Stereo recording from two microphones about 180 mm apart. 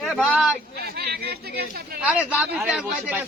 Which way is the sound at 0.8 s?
60° right (ahead or behind).